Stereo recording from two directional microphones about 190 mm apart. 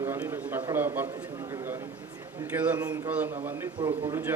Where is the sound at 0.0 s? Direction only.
15° right (ahead or behind).